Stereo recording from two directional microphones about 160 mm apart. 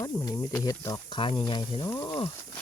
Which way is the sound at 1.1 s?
30° left (ahead or behind).